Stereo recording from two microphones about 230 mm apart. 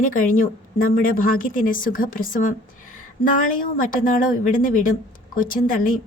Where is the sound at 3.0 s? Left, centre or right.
Left.